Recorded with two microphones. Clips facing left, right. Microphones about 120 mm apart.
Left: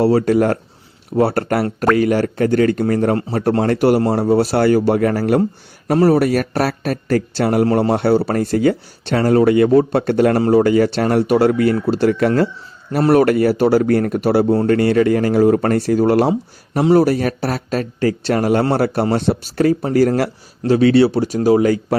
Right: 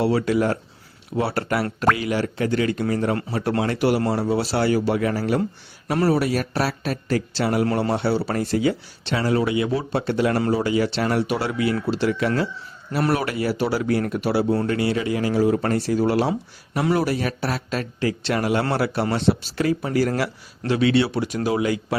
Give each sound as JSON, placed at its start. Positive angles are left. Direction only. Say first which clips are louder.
{"t": 0.0, "sound": "speech", "louder": "left 6 dB", "side_deg": 40}